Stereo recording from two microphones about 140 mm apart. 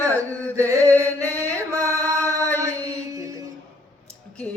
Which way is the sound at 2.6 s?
25° right (ahead or behind).